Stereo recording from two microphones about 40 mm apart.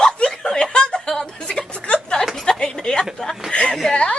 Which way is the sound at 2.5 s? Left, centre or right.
Centre.